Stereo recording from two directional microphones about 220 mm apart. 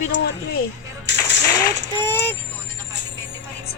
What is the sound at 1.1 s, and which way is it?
Music, 50° left (ahead or behind).